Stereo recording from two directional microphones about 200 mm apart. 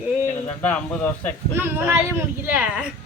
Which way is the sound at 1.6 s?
10° right (ahead or behind).